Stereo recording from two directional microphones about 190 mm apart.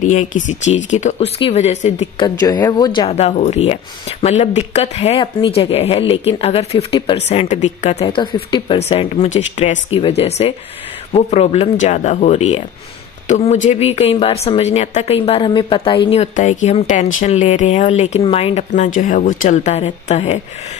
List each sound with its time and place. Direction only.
0.0 s speech: 40° left (ahead or behind)
2.2 s speech: 20° left (ahead or behind)